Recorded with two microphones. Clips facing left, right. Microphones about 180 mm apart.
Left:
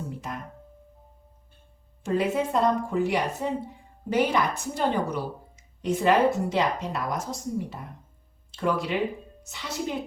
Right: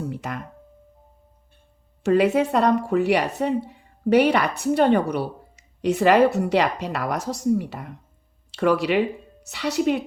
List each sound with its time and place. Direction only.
0.1 s music: 75° right (ahead or behind)
2.0 s a woman's voice: 75° right (ahead or behind)